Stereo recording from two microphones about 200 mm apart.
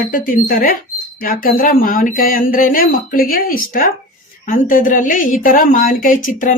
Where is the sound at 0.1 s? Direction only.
45° left (ahead or behind).